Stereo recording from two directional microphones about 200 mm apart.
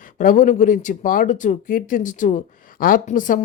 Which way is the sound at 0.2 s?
40° left (ahead or behind).